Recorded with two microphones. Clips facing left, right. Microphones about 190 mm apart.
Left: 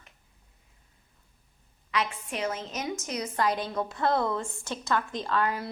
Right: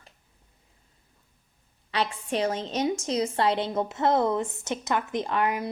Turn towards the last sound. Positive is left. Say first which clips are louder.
# right 2 dB
turn(degrees=-20)  # may be behind; listen again after turning